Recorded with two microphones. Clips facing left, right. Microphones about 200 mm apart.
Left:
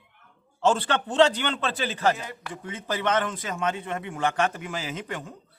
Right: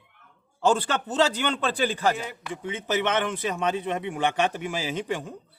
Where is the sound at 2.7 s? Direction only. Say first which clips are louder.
Right 1 dB; 25° right (ahead or behind).